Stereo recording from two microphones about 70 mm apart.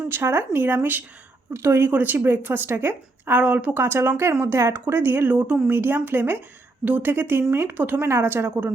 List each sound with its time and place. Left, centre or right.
0.0 s a woman's voice: right